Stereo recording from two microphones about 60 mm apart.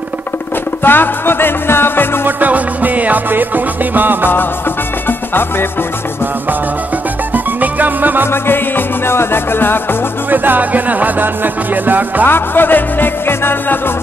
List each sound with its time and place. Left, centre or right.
0.8 s music: left
2.2 s music: right
5.0 s music: left
7.3 s music: right
8.3 s music: left
10.3 s music: right
12.3 s music: left